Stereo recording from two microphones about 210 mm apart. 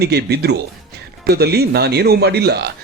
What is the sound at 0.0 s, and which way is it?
A man's voice, 50° right (ahead or behind).